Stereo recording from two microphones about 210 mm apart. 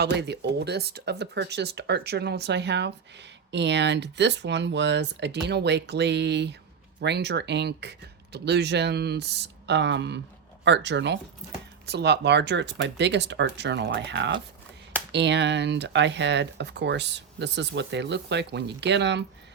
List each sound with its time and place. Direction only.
0.0 s speech: 55° right (ahead or behind)